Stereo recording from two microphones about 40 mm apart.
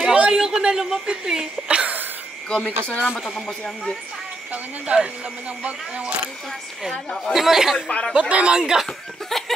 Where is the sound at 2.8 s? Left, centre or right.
Left.